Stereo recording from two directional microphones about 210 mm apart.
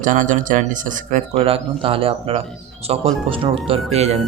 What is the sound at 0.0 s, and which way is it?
A man's voice, 40° right (ahead or behind).